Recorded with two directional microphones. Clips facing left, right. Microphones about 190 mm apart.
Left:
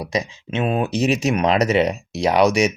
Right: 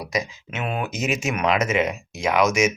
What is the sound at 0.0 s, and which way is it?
Speech, 25° left (ahead or behind).